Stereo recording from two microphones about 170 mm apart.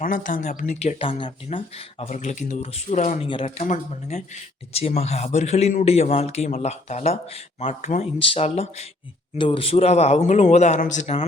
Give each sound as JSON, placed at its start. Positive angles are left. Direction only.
{"t": 0.0, "sound": "speech", "side_deg": 50}
{"t": 3.2, "sound": "speech", "side_deg": 30}
{"t": 3.6, "sound": "speech", "side_deg": 45}
{"t": 4.7, "sound": "speech", "side_deg": 35}